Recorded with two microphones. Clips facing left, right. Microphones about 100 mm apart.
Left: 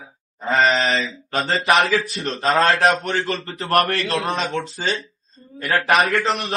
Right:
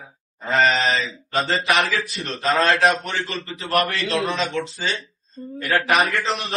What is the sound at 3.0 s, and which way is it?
Speech, 45° left (ahead or behind).